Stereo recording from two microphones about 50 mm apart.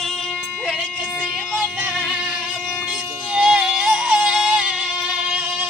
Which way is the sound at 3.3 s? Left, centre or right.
Right.